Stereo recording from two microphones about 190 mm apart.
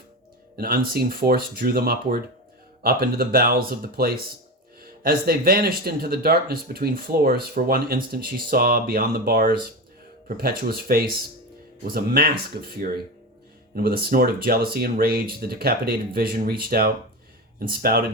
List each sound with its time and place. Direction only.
0.5 s speech: 55° right (ahead or behind)
13.7 s speech: 50° right (ahead or behind)